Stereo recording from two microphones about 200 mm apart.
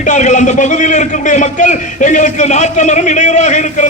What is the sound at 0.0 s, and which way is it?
A man's voice, 35° left (ahead or behind).